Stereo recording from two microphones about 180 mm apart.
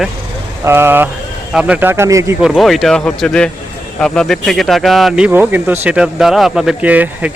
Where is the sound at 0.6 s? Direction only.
10° right (ahead or behind).